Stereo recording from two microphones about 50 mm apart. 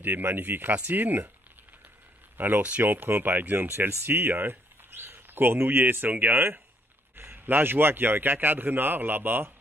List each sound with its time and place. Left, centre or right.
0.0 s speech: right
2.3 s a man's voice: right